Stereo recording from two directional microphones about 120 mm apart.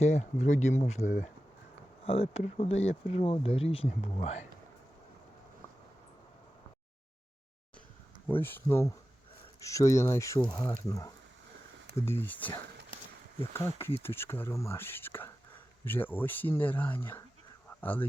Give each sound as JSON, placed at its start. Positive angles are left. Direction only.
{"t": 0.0, "sound": "speech", "side_deg": 70}
{"t": 2.0, "sound": "speech", "side_deg": 55}
{"t": 8.3, "sound": "speech", "side_deg": 15}
{"t": 11.9, "sound": "speech", "side_deg": 20}
{"t": 13.7, "sound": "speech", "side_deg": 20}